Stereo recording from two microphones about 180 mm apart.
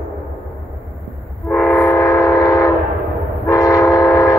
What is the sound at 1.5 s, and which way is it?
Train, 15° left (ahead or behind).